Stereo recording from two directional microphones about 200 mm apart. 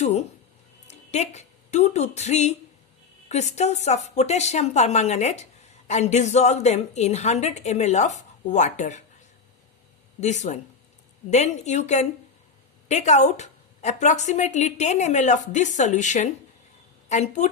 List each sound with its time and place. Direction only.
0.0 s a sound: 35° left (ahead or behind)
0.9 s a woman's voice: 35° left (ahead or behind)
10.2 s a woman's voice: 35° left (ahead or behind)